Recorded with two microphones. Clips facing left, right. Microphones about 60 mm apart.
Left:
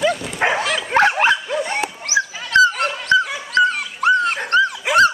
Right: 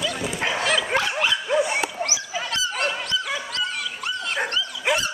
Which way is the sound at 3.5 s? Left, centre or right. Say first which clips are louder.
Left 11 dB; left.